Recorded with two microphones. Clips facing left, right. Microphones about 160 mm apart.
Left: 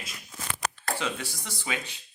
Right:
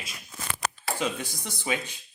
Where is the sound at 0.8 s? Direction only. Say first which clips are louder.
Right 3 dB; 15° right (ahead or behind).